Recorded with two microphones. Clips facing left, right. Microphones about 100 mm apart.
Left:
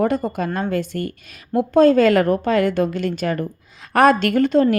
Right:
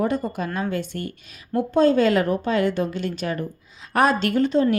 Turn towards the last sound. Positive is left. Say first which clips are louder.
# left 3 dB
turn(degrees=60)  # may be behind; listen again after turning